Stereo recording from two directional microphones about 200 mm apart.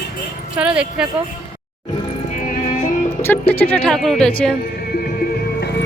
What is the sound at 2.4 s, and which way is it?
Music, 45° left (ahead or behind).